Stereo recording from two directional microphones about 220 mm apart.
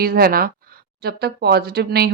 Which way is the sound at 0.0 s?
45° right (ahead or behind).